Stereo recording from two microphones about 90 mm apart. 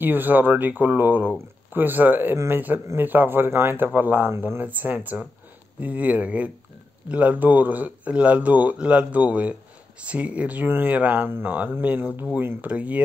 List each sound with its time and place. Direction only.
0.0 s speech: 20° right (ahead or behind)